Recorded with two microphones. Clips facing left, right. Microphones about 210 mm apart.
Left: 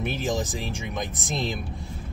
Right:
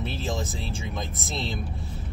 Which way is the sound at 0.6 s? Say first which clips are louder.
Left 2 dB; 15° left (ahead or behind).